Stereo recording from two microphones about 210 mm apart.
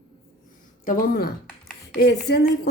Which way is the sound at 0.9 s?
40° left (ahead or behind).